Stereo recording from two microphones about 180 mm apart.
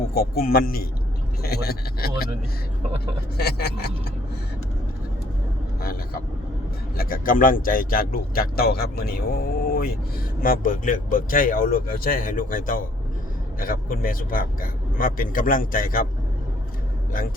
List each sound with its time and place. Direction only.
0.1 s speech: 55° left (ahead or behind)
3.3 s speech: 60° left (ahead or behind)
5.8 s speech: 55° left (ahead or behind)